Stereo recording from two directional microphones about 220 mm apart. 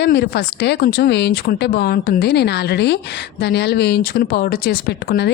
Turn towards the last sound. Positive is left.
turn(degrees=50)  # may be behind; listen again after turning